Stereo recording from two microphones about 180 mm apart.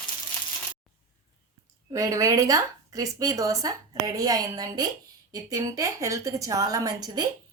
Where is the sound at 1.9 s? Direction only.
20° right (ahead or behind).